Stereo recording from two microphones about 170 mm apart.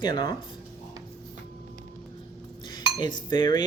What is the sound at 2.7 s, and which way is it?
Dishes, 25° left (ahead or behind).